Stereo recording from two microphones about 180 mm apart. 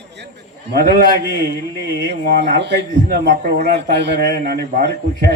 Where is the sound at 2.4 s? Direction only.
70° right (ahead or behind).